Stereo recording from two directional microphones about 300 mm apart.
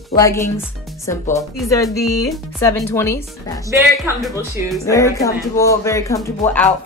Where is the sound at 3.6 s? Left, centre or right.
Centre.